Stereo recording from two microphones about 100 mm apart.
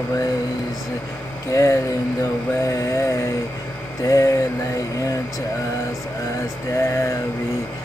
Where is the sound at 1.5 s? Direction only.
30° left (ahead or behind).